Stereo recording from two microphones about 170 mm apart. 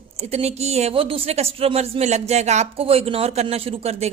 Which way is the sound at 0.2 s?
40° right (ahead or behind).